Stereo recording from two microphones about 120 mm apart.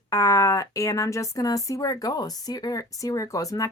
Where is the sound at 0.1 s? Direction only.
25° left (ahead or behind).